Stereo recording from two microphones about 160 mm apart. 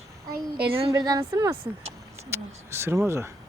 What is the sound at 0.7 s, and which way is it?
A woman's voice, 30° right (ahead or behind).